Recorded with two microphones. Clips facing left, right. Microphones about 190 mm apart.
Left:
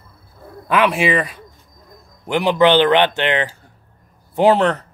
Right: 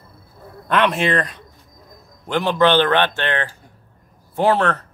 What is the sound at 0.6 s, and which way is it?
Speech, 5° left (ahead or behind).